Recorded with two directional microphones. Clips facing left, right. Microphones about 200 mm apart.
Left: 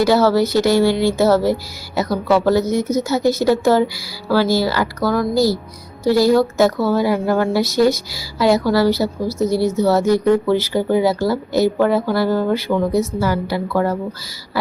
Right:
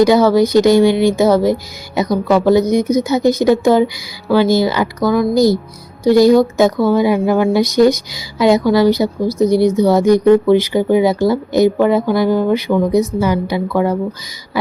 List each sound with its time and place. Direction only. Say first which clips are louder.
0.0 s speech: right 4 dB; 15° right (ahead or behind)